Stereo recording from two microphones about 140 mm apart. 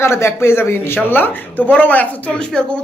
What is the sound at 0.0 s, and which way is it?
Speech, 20° left (ahead or behind).